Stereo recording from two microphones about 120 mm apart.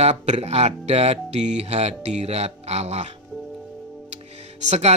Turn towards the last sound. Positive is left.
turn(degrees=-70)  # may be behind; listen again after turning